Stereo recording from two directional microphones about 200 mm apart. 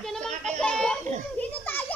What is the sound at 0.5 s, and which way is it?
Children playing, 5° left (ahead or behind).